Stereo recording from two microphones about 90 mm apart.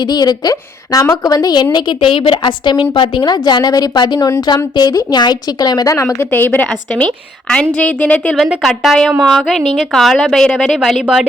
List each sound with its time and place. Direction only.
0.1 s a woman's voice: 50° left (ahead or behind)
1.7 s a woman's voice: 65° left (ahead or behind); by 6.2 s 35° left (ahead or behind)
6.3 s a woman's voice: 20° left (ahead or behind)
8.6 s a woman's voice: centre (ahead or behind)